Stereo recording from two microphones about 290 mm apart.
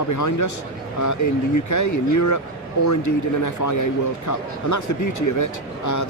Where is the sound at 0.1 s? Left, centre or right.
Left.